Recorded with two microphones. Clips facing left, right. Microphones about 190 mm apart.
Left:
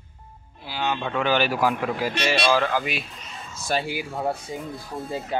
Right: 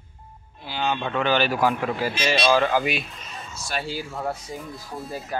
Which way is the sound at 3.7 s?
15° left (ahead or behind).